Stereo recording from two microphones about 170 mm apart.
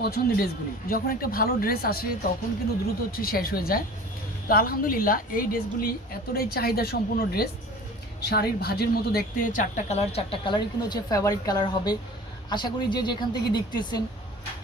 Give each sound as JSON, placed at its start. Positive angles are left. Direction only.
{"t": 0.0, "sound": "a woman's voice", "side_deg": 60}
{"t": 3.1, "sound": "a woman's voice", "side_deg": 60}